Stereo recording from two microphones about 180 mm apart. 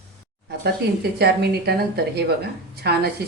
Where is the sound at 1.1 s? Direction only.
60° right (ahead or behind).